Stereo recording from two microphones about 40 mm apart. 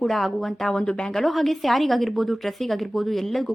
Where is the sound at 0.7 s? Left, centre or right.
Left.